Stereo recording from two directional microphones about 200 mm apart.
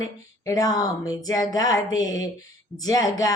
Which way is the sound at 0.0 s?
20° left (ahead or behind).